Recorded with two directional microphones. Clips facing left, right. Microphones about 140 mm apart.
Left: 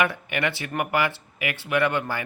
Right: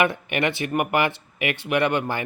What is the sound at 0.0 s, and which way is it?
Speech, 20° right (ahead or behind).